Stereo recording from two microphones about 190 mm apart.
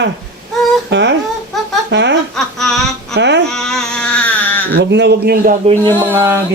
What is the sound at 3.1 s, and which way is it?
Speech, 65° right (ahead or behind).